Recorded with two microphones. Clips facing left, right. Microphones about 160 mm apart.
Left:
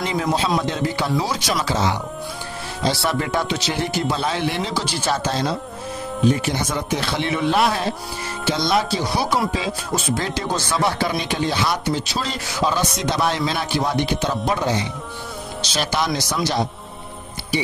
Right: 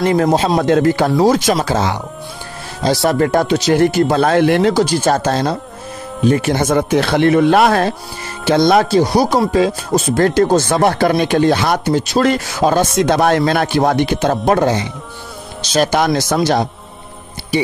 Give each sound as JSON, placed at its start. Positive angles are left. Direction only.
{"t": 0.0, "sound": "speech", "side_deg": -55}